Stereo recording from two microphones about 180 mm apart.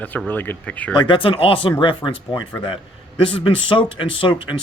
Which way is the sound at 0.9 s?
25° left (ahead or behind).